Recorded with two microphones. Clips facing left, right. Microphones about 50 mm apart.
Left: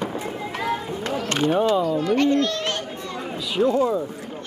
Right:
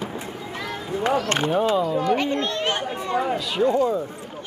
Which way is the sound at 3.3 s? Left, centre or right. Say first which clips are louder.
Left 4 dB; centre.